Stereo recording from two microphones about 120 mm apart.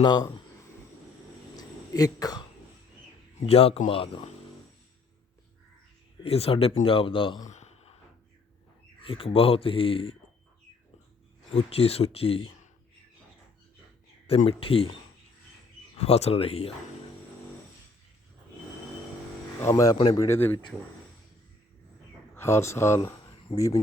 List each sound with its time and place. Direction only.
0.0 s speech: 40° left (ahead or behind)
1.5 s a sound: 30° left (ahead or behind)
3.4 s speech: 55° left (ahead or behind)
6.2 s speech: 55° left (ahead or behind)
7.4 s a sound: 75° left (ahead or behind)
9.0 s speech: 50° left (ahead or behind)
11.5 s speech: 55° left (ahead or behind)
14.3 s speech: 50° left (ahead or behind)
16.0 s speech: 60° left (ahead or behind)
19.6 s speech: 25° left (ahead or behind)
22.4 s speech: 20° left (ahead or behind)
23.0 s a sound: 25° left (ahead or behind)
23.6 s speech: 30° left (ahead or behind)